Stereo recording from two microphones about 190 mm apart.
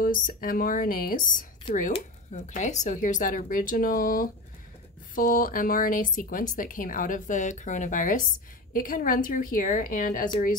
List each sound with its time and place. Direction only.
0.0 s speech: 50° left (ahead or behind)
1.7 s speech: 30° left (ahead or behind)